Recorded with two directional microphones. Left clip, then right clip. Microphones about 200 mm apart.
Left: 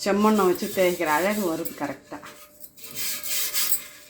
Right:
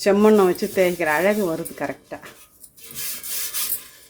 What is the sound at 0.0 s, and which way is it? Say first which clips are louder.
Speech: right 6 dB; 30° right (ahead or behind).